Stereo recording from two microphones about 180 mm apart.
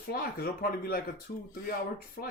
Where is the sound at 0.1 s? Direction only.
55° left (ahead or behind).